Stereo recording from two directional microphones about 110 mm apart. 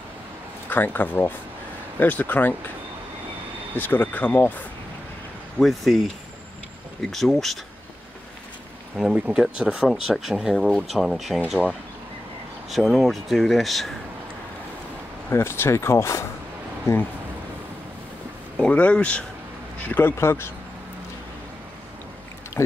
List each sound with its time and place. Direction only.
0.7 s speech: 15° left (ahead or behind)
3.7 s speech: 15° left (ahead or behind)
5.6 s speech: centre (ahead or behind)
7.1 s speech: centre (ahead or behind)
8.9 s speech: 5° right (ahead or behind)
12.6 s speech: centre (ahead or behind)
15.2 s speech: 20° left (ahead or behind)
18.6 s speech: 10° left (ahead or behind)